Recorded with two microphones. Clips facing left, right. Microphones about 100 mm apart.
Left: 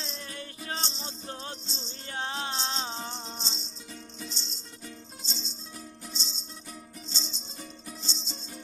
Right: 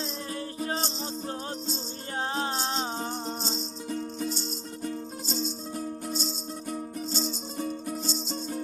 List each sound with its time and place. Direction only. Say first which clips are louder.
0.0 s music: right 6 dB; 35° right (ahead or behind)